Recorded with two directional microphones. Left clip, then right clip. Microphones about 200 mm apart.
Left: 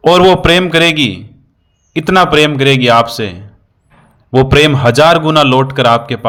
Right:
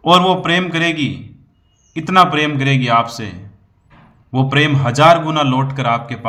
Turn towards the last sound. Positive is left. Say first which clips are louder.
# left 8 dB
turn(degrees=35)  # may be behind; listen again after turning